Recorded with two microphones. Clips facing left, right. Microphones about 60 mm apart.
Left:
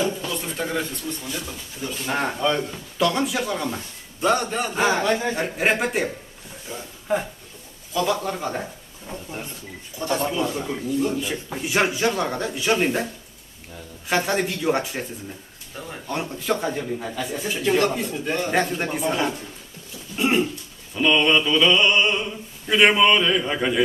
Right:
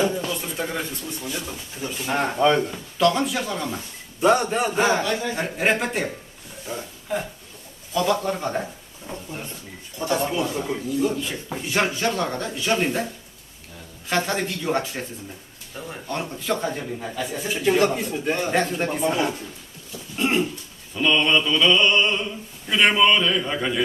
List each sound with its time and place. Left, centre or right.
0.3 s a sound: centre
1.2 s a man's voice: centre
4.2 s a man's voice: centre
7.9 s a man's voice: centre
10.0 s a man's voice: centre
14.1 s a man's voice: centre
18.5 s a man's voice: centre
20.1 s a sound: centre
20.9 s speech: centre